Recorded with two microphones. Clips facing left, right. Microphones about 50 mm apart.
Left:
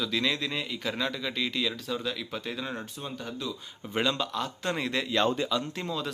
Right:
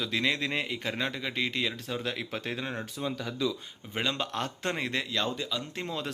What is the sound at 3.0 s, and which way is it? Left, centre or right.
Speech, right.